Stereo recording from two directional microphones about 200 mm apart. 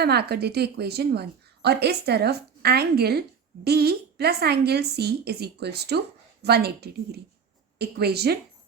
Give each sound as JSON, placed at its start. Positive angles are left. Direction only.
{"t": 0.0, "sound": "a woman's voice", "side_deg": -55}